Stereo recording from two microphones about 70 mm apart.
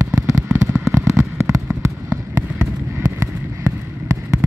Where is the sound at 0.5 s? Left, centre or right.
Right.